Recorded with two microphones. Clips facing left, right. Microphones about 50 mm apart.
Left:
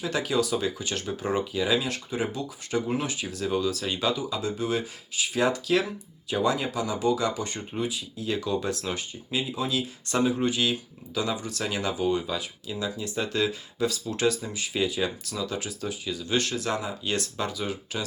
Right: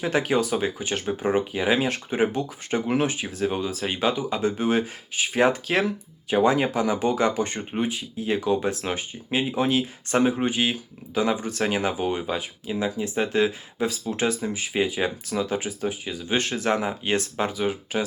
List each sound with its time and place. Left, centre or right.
0.0 s speech: right
3.1 s speech: right